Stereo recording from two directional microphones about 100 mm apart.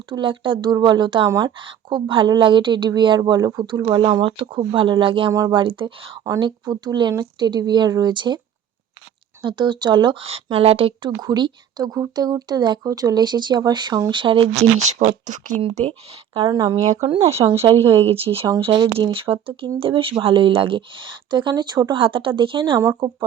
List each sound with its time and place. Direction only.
0.1 s speech: 55° right (ahead or behind)
3.2 s speech: 40° right (ahead or behind)
3.8 s speech: 55° right (ahead or behind)
6.4 s speech: 45° right (ahead or behind)
9.4 s speech: 50° right (ahead or behind)
10.2 s speech: 80° right
11.2 s speech: 45° right (ahead or behind)
15.0 s speech: 90° right
15.6 s speech: 65° right (ahead or behind)
16.5 s speech: 45° right (ahead or behind)
17.0 s speech: 80° right
17.7 s speech: 50° right (ahead or behind)
18.1 s speech: 70° right (ahead or behind)
23.0 s speech: 45° right (ahead or behind)